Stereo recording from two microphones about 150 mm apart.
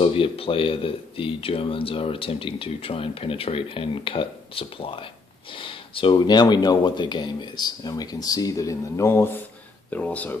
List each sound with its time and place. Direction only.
0.0 s speech: 40° left (ahead or behind); by 10.3 s 10° left (ahead or behind)